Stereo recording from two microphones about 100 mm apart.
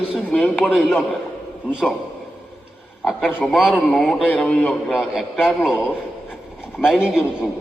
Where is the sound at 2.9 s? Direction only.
Centre (ahead or behind).